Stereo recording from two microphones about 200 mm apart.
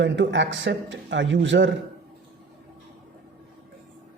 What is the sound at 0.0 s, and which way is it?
A man's voice, 65° right (ahead or behind).